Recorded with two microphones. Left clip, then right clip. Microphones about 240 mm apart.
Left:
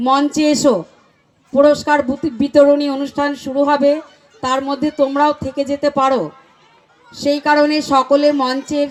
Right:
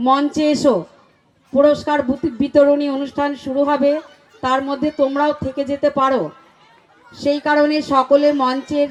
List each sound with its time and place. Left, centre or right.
0.0 s speech: left